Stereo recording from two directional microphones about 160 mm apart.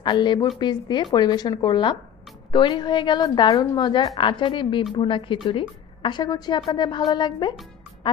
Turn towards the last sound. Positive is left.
turn(degrees=30)  # may be behind; listen again after turning